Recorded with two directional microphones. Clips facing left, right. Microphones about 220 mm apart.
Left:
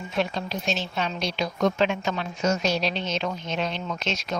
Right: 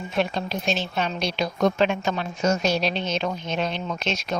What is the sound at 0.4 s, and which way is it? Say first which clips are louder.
A woman's voice: right 2 dB; 55° right (ahead or behind).